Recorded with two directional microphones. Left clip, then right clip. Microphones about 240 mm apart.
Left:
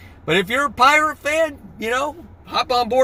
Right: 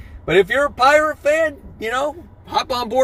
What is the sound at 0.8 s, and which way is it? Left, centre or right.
Speech, left.